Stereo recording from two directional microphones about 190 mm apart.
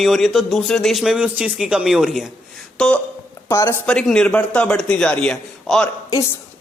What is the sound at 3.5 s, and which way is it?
A man's voice, 15° left (ahead or behind).